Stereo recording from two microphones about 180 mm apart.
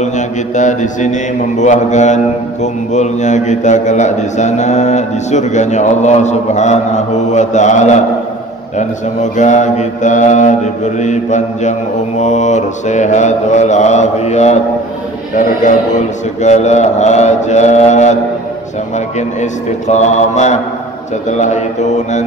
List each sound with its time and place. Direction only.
0.6 s mantra: 45° left (ahead or behind)
1.6 s a man's voice: 40° left (ahead or behind)
16.4 s a man's voice: 40° left (ahead or behind)
19.9 s a man's voice: 40° left (ahead or behind)